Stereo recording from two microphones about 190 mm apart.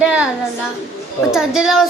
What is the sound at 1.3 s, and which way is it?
Speech, 5° right (ahead or behind).